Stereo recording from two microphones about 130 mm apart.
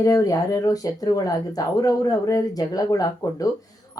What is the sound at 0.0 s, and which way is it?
A woman's voice, 25° left (ahead or behind).